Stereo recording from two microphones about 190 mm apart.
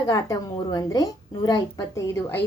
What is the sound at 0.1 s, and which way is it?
A woman's voice, 20° left (ahead or behind).